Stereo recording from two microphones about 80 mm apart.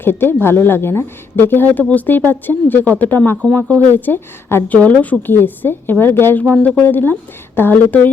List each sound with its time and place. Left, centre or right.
0.0 s a woman's voice: left
3.5 s speech: centre
3.9 s a woman's voice: left
6.5 s a woman's voice: centre